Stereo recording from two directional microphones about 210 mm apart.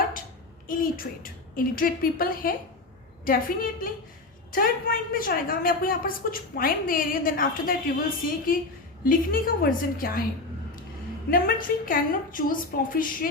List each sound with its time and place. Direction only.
0.7 s a woman's voice: 40° left (ahead or behind)
11.3 s a woman's voice: 45° left (ahead or behind)